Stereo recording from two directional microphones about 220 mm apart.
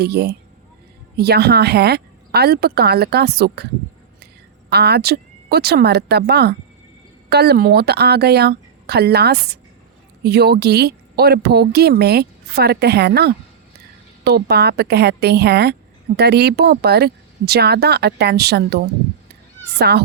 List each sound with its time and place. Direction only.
0.0 s a woman's voice: 45° right (ahead or behind)
4.7 s a woman's voice: 50° right (ahead or behind)
19.9 s a woman's voice: 45° right (ahead or behind)